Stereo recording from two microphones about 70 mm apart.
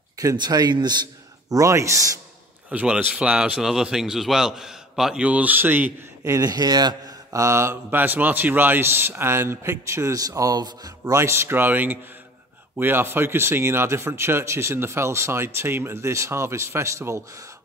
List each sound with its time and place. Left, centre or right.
0.4 s speech: right
1.5 s speech: right
2.7 s speech: centre
5.2 s a man's voice: right
6.4 s a man's voice: right
7.3 s speech: right
7.7 s speech: right
10.1 s a man's voice: right
11.1 s a man's voice: right